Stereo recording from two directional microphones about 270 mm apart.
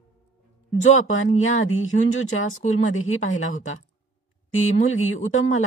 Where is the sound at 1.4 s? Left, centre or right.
Left.